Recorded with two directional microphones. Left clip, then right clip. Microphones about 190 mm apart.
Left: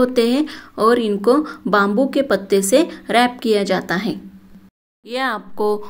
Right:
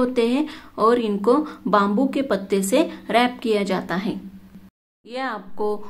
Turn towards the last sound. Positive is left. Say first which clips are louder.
# left 6 dB
turn(degrees=25)  # may be behind; listen again after turning